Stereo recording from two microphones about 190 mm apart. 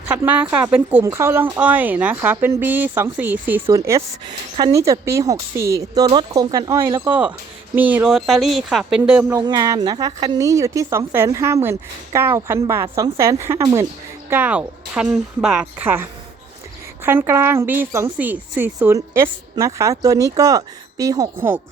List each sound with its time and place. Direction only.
0.1 s speech: 10° right (ahead or behind)
9.4 s speech: 20° right (ahead or behind)